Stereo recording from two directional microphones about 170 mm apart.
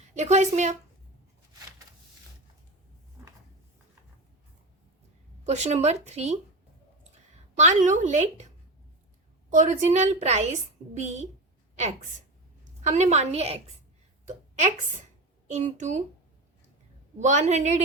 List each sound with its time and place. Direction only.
0.1 s a woman's voice: 45° right (ahead or behind)
5.5 s speech: 40° right (ahead or behind)
9.5 s a woman's voice: 45° right (ahead or behind)
12.8 s speech: 45° right (ahead or behind)
15.4 s a woman's voice: 45° right (ahead or behind)
17.2 s a woman's voice: 45° right (ahead or behind)